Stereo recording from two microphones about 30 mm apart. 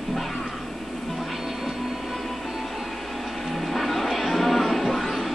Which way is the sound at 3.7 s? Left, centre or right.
Centre.